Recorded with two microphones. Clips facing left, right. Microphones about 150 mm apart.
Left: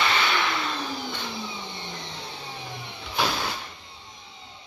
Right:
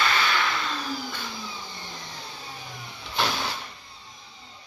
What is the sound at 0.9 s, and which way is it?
Vehicle, 25° left (ahead or behind).